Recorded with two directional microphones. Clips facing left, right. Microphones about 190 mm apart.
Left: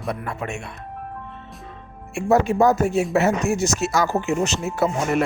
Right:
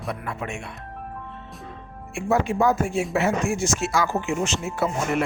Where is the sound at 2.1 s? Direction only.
40° left (ahead or behind).